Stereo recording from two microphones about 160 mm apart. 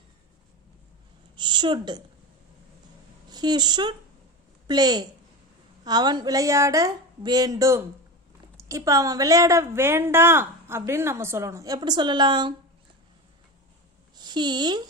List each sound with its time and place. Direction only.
1.4 s a sound: 30° right (ahead or behind)
3.2 s a woman's voice: 25° right (ahead or behind)
14.2 s speech: 25° right (ahead or behind)